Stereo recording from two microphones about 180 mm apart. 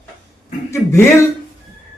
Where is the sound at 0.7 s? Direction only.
15° left (ahead or behind).